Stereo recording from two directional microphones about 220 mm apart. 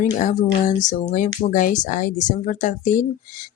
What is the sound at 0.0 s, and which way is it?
Speech, 35° left (ahead or behind).